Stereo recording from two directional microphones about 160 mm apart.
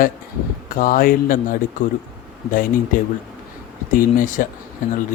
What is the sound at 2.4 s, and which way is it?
Speech, 60° left (ahead or behind).